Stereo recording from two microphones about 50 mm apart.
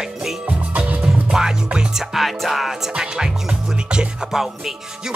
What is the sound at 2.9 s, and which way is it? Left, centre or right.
Music, centre.